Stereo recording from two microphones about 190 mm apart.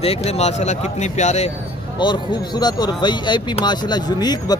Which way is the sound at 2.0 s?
25° left (ahead or behind).